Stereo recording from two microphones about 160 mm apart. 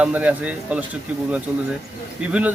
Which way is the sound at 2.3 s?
5° right (ahead or behind).